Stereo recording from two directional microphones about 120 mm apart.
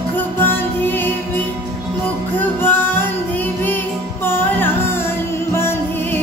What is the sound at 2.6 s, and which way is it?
Music, 20° left (ahead or behind).